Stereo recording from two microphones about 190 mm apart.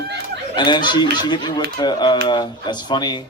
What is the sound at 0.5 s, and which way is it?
A man's voice, 25° left (ahead or behind).